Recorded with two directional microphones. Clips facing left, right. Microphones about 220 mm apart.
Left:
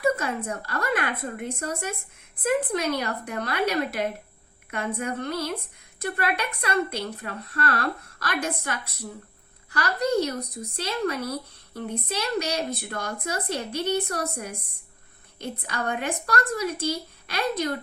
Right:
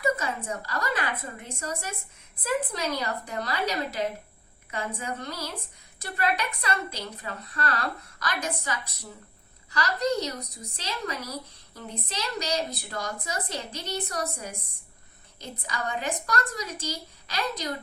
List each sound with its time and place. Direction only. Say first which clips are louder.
0.0 s speech: left 3 dB; 55° left (ahead or behind)
9.7 s speech: left 3 dB; 55° left (ahead or behind)
15.7 s speech: left 2 dB; 60° left (ahead or behind)